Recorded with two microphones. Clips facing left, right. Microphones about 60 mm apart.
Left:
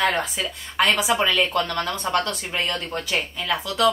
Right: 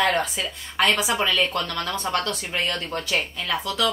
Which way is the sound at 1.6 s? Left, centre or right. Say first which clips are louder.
Left 2 dB; centre.